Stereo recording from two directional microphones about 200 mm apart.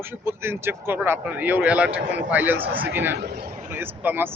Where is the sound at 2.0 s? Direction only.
65° right (ahead or behind).